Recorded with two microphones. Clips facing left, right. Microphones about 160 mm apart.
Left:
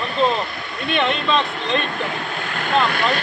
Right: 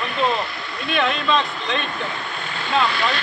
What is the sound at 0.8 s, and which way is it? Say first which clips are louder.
A man's voice: left 1 dB; centre (ahead or behind).